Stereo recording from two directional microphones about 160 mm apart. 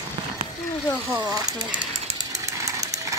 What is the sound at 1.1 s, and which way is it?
Speech, 25° right (ahead or behind).